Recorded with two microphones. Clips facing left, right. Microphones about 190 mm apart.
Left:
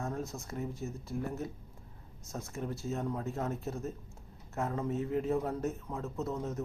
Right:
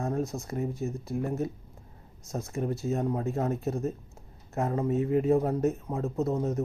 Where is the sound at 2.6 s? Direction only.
55° right (ahead or behind).